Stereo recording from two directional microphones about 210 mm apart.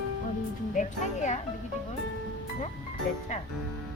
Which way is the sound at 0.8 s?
35° left (ahead or behind).